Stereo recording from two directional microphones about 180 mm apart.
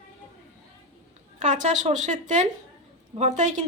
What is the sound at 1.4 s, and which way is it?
A woman's voice, 45° right (ahead or behind).